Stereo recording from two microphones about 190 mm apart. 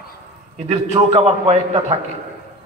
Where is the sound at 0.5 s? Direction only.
35° right (ahead or behind).